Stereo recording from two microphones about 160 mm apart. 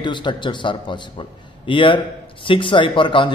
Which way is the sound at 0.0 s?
30° left (ahead or behind).